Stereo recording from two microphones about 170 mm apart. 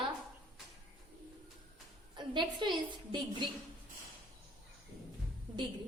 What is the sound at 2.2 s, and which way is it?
A woman's voice, 25° right (ahead or behind).